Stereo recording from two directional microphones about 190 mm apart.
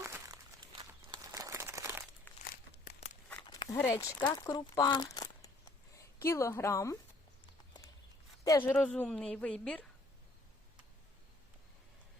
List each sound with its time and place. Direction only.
0.0 s crumpling: 20° right (ahead or behind)
2.3 s crumpling: 10° left (ahead or behind)
3.4 s a sound: 25° left (ahead or behind)
3.8 s speech: 10° left (ahead or behind)
8.4 s speech: 15° left (ahead or behind)